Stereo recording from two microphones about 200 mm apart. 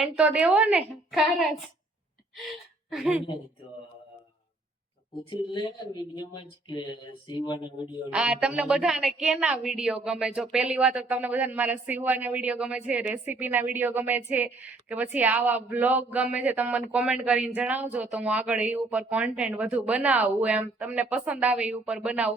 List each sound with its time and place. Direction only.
0.0 s a woman's voice: 5° right (ahead or behind)
2.9 s a woman's voice: 5° right (ahead or behind)
5.3 s speech: 20° left (ahead or behind)
8.1 s a woman's voice: 5° right (ahead or behind)